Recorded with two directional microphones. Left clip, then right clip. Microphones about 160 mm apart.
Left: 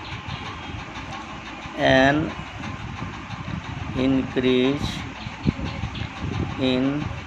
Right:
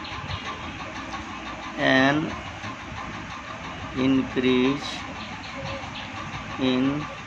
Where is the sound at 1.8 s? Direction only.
20° left (ahead or behind).